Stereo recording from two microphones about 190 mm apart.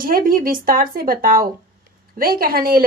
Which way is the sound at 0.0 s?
50° right (ahead or behind).